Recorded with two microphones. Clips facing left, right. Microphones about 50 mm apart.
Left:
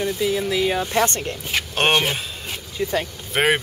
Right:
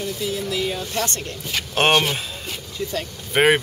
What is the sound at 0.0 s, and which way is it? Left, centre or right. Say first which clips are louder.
Speech: left 4 dB; left.